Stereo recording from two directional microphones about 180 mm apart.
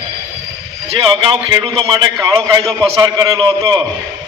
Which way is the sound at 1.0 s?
30° right (ahead or behind).